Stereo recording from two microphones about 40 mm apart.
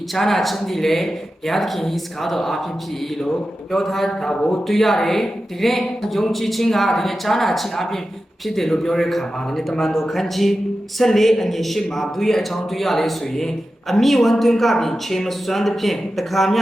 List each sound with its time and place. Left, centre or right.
0.1 s a man's voice: centre
4.4 s speech: left
4.7 s speech: centre